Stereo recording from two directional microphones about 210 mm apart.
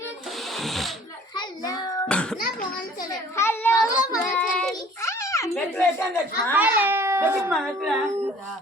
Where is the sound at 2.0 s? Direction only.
5° left (ahead or behind).